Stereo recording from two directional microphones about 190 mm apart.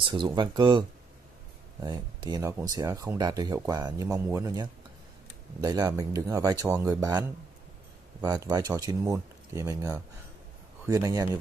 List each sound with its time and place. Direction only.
0.0 s speech: 25° right (ahead or behind)